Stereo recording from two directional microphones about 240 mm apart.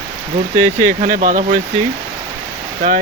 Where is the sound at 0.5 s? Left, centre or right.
Right.